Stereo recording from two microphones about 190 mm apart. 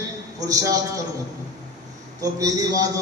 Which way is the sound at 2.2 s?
20° right (ahead or behind).